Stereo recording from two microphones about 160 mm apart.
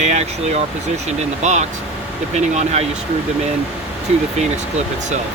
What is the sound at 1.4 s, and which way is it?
Speech, 45° right (ahead or behind).